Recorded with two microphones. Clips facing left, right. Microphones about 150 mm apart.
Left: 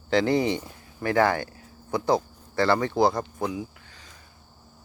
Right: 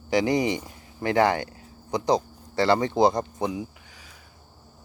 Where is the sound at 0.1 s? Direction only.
15° right (ahead or behind).